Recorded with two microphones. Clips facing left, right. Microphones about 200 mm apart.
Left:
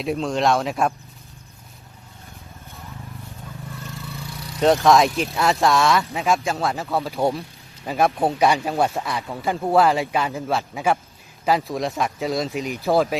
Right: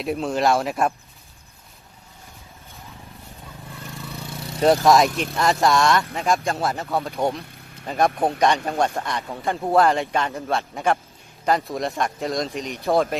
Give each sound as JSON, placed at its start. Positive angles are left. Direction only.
{"t": 0.0, "sound": "speech", "side_deg": 0}
{"t": 4.4, "sound": "vehicle", "side_deg": -25}
{"t": 4.6, "sound": "speech", "side_deg": 0}